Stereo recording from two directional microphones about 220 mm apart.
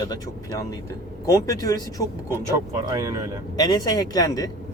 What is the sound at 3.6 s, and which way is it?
Speech, 15° left (ahead or behind).